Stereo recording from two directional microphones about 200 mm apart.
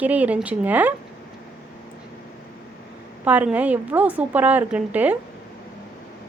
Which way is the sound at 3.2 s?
5° right (ahead or behind).